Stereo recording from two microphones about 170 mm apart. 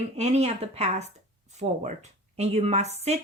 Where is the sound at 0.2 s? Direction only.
40° right (ahead or behind).